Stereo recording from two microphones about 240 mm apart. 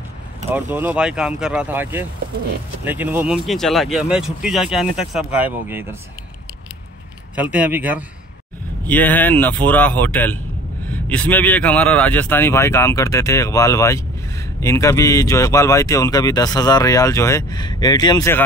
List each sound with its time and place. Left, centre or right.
0.5 s speech: centre
7.3 s speech: centre
8.8 s speech: centre